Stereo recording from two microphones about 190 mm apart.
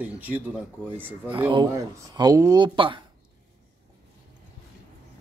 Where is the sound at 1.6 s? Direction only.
20° right (ahead or behind).